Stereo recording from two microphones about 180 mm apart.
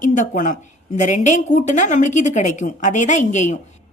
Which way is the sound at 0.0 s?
45° left (ahead or behind).